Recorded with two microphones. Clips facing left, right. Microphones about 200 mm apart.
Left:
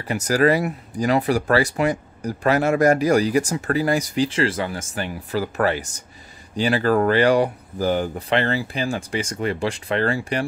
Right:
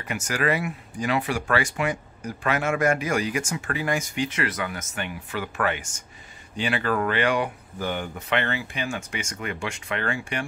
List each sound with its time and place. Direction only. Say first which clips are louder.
0.0 s speech: left 8 dB; 35° left (ahead or behind)